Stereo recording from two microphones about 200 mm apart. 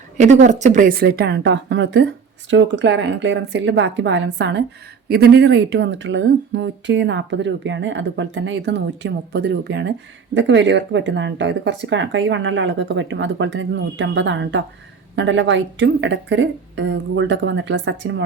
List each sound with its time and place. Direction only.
0.2 s a woman's voice: 35° right (ahead or behind); by 18.2 s 65° right (ahead or behind)